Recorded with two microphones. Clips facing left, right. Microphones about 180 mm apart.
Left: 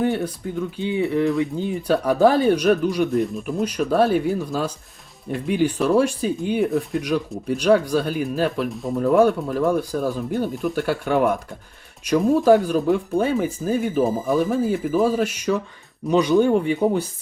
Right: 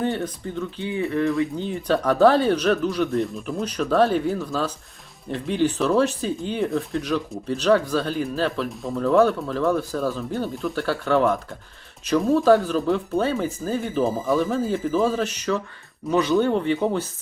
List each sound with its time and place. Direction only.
0.4 s speech: 10° left (ahead or behind)
0.8 s speech: 20° left (ahead or behind)
6.7 s speech: centre (ahead or behind)
7.4 s speech: 10° left (ahead or behind)